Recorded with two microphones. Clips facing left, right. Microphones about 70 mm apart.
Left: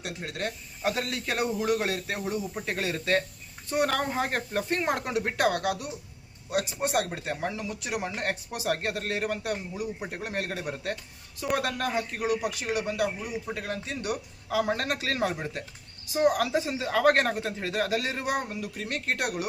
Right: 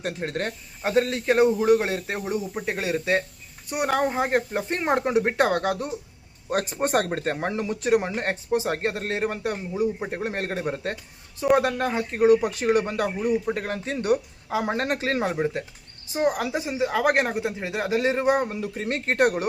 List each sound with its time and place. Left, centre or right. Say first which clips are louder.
0.0 s speech: right 5 dB; right